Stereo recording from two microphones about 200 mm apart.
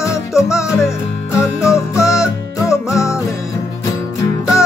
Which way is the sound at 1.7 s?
15° left (ahead or behind).